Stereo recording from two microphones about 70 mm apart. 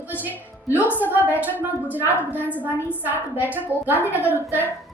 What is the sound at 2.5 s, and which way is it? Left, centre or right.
Speech, left.